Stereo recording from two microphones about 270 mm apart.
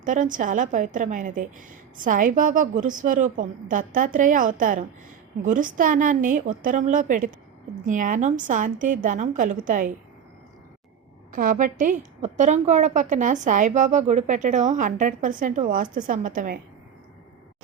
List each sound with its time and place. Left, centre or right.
0.0 s a woman's voice: right
11.3 s a woman's voice: right